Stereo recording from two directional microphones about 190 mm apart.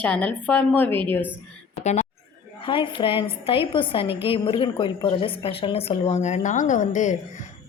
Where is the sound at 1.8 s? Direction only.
35° left (ahead or behind).